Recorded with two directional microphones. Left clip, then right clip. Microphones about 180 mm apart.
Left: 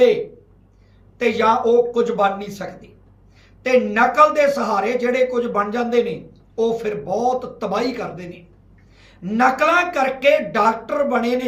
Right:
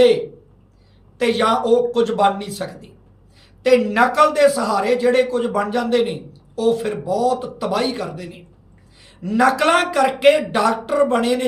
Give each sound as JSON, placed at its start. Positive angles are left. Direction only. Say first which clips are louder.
{"t": 1.2, "sound": "a man's voice", "louder": "left 1 dB", "side_deg": -20}